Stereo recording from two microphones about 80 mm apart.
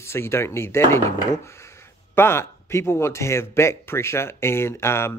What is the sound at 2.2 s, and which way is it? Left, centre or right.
Speech, left.